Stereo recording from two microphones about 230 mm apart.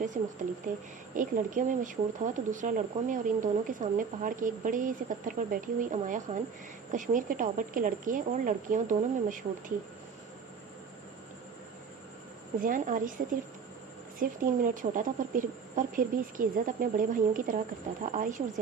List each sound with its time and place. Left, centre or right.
0.1 s speech: right
12.6 s speech: right
14.2 s speech: right